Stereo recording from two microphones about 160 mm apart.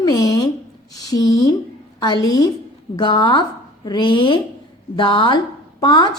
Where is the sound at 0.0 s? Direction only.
25° left (ahead or behind).